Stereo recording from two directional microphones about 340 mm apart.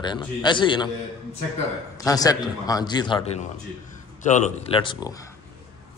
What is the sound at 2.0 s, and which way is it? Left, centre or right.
A man's voice, centre.